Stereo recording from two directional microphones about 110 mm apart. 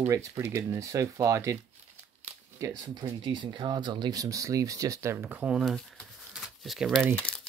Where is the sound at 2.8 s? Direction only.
40° right (ahead or behind); by 5.8 s 5° right (ahead or behind).